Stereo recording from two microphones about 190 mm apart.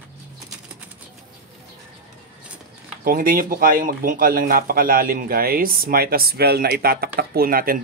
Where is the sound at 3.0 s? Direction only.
50° right (ahead or behind).